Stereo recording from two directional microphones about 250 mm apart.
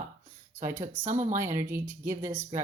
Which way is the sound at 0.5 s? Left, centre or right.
Right.